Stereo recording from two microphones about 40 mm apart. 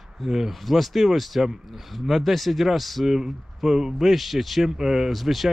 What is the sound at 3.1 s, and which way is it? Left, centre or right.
Speech, centre.